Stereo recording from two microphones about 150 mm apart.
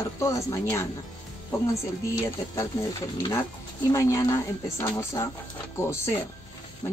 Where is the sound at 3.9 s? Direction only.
20° left (ahead or behind).